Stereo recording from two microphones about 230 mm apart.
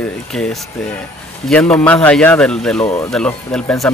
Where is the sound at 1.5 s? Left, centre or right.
Centre.